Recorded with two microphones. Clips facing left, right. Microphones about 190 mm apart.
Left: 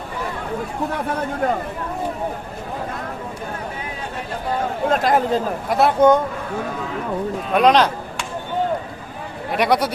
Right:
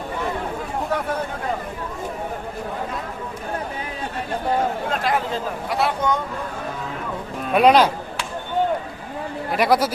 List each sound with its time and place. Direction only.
4.9 s speech: 40° left (ahead or behind)
7.5 s speech: 10° right (ahead or behind)
9.5 s speech: centre (ahead or behind)